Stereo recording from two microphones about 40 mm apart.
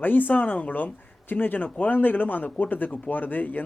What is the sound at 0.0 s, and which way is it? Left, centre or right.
Speech, left.